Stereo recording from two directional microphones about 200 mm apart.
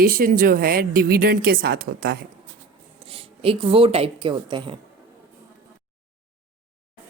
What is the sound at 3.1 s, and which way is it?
A woman's voice, 30° right (ahead or behind).